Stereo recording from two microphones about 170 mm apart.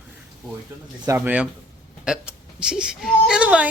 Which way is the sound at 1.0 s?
10° right (ahead or behind).